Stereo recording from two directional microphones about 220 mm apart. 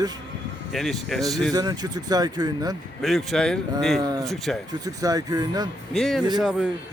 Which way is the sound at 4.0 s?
15° right (ahead or behind).